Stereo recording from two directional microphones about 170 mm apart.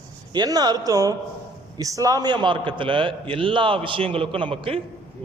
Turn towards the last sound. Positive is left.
turn(degrees=-30)  # may be behind; listen again after turning